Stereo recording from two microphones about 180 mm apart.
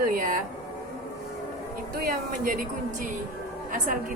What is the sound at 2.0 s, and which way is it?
A woman's voice, 50° right (ahead or behind).